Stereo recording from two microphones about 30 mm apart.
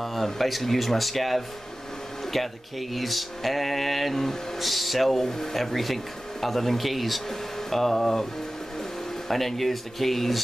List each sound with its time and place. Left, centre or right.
0.0 s speech: centre
4.6 s speech: centre
5.2 s speech: centre
5.6 s speech: centre
9.3 s speech: centre